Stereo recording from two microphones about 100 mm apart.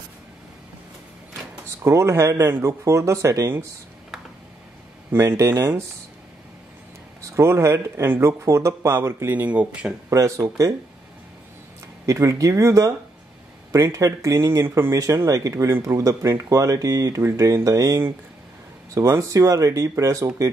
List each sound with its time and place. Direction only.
1.8 s speech: 30° right (ahead or behind)
5.1 s speech: 25° right (ahead or behind)
7.2 s speech: 30° right (ahead or behind); by 9.9 s 15° right (ahead or behind)
10.0 s speech: 35° right (ahead or behind)
12.1 s speech: 30° right (ahead or behind)